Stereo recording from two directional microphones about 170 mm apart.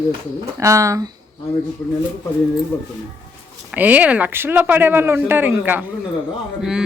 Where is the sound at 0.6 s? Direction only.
20° right (ahead or behind).